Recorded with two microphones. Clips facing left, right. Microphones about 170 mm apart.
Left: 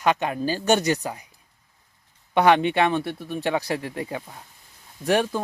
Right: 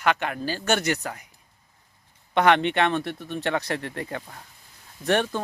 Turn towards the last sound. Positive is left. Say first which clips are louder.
# left 2 dB
turn(degrees=10)  # may be behind; listen again after turning